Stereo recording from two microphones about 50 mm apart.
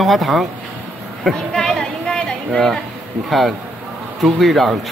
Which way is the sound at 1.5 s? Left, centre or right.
Centre.